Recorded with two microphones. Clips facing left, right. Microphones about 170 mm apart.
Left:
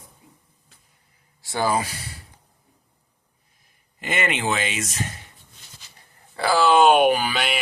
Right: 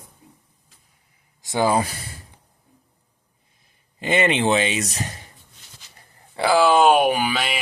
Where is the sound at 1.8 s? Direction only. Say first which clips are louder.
Right 4 dB; 50° right (ahead or behind).